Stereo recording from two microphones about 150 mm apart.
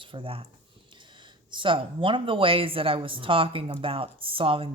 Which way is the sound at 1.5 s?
35° right (ahead or behind).